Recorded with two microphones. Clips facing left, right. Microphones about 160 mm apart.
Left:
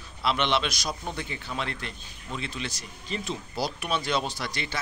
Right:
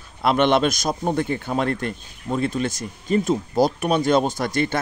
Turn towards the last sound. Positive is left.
turn(degrees=-50)  # may be behind; listen again after turning